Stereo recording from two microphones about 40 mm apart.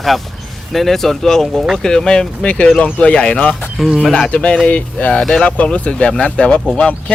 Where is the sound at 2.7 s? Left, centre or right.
Left.